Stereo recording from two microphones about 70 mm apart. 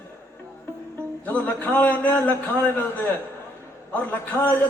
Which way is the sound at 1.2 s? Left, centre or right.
Left.